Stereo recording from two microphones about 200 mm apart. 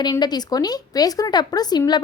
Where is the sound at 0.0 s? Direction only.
20° left (ahead or behind).